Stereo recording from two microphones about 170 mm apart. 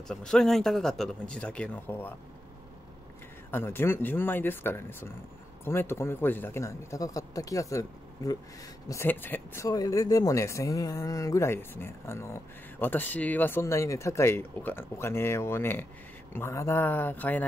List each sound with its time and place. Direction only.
0.1 s speech: 5° left (ahead or behind)
3.5 s speech: 15° left (ahead or behind)